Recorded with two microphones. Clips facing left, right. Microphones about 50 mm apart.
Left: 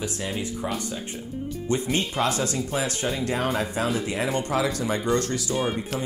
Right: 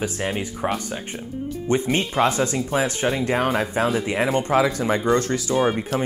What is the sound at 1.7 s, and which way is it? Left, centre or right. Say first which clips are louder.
Speech: right 4 dB; right.